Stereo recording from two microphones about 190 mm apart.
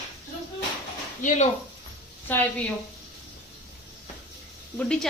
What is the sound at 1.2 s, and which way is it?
Speech, 40° left (ahead or behind).